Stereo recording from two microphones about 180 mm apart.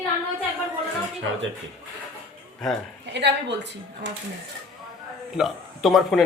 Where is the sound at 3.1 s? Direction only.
70° right (ahead or behind).